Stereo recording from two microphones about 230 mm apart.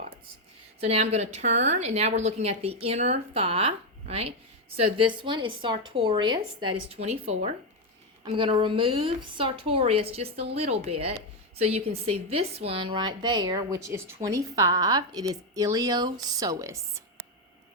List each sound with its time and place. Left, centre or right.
0.8 s a woman's voice: right